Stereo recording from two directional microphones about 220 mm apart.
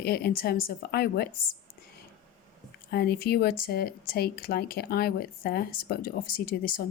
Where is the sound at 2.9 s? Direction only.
45° left (ahead or behind).